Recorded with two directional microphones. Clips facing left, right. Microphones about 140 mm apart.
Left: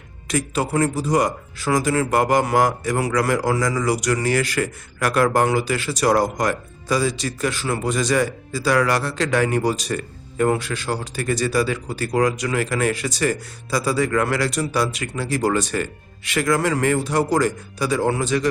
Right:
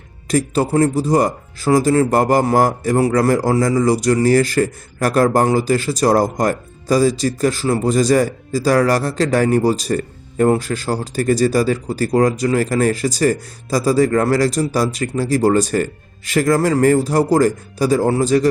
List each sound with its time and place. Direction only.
0.3 s speech: 35° right (ahead or behind)